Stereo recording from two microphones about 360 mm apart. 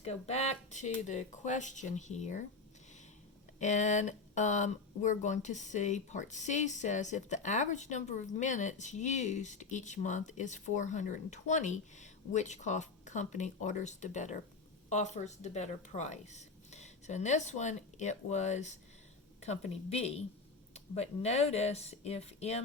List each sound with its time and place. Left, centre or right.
0.0 s speech: centre
3.6 s speech: centre